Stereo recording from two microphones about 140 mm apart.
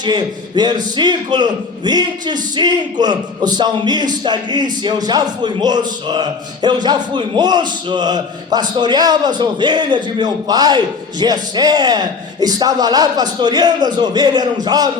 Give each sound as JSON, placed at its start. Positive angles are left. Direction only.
{"t": 0.0, "sound": "a man's voice", "side_deg": -30}